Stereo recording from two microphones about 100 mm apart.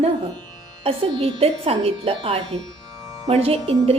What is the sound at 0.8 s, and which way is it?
Speech, 70° right (ahead or behind).